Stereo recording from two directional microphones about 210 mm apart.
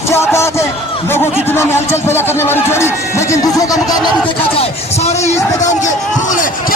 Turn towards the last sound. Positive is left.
turn(degrees=40)  # may be behind; listen again after turning